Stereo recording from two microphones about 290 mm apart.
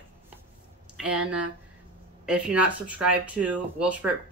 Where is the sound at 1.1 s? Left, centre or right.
Right.